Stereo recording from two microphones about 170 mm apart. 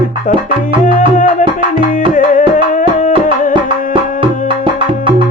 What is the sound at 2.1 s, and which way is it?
Music, 50° left (ahead or behind).